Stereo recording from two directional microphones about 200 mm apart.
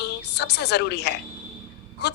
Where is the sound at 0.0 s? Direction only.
55° left (ahead or behind).